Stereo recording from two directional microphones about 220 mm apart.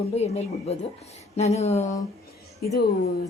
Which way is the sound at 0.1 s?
30° left (ahead or behind).